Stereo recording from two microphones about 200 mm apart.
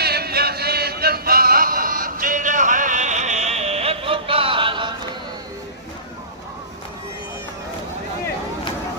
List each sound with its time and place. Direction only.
0.0 s music: 50° right (ahead or behind); by 4.9 s 25° right (ahead or behind)